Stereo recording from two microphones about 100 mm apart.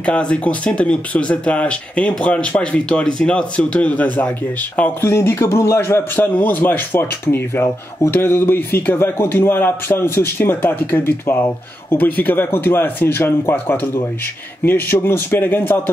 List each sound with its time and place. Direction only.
0.0 s speech: 10° left (ahead or behind)